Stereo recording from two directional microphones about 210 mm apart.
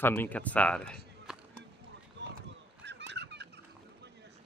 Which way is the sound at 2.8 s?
55° right (ahead or behind).